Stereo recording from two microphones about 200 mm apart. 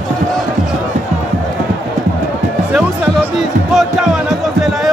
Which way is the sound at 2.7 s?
5° right (ahead or behind).